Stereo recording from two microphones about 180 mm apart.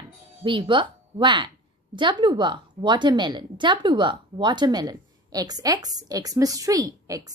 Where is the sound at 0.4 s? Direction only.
25° right (ahead or behind).